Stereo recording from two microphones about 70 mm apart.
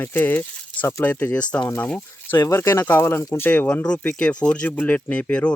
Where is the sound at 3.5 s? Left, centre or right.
Left.